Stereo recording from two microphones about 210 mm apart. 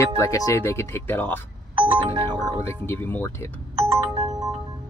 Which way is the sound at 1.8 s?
25° right (ahead or behind).